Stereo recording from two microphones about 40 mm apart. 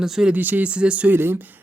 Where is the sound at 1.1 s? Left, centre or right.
Right.